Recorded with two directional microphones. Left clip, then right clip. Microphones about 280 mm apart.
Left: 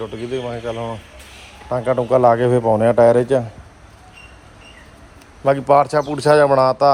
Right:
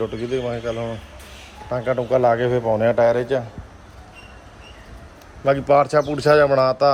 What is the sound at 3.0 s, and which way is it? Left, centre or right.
Speech, left.